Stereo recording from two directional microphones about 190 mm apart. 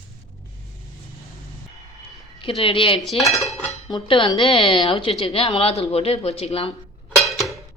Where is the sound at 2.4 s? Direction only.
30° left (ahead or behind).